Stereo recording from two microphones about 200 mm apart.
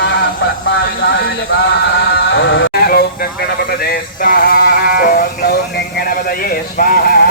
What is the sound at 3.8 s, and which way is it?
Synthetic singing, 50° left (ahead or behind).